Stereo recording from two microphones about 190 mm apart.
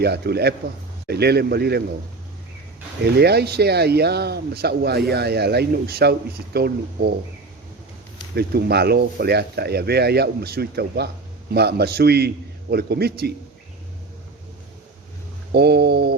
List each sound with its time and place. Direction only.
0.0 s speech: 55° right (ahead or behind)
3.0 s speech: 60° right (ahead or behind)
8.4 s speech: 55° right (ahead or behind)
15.5 s speech: 60° right (ahead or behind)